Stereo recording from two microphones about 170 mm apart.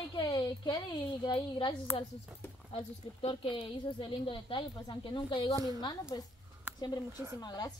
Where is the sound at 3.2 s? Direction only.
30° left (ahead or behind).